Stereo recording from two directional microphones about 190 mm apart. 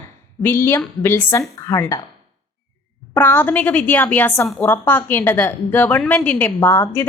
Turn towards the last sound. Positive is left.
turn(degrees=15)  # may be behind; listen again after turning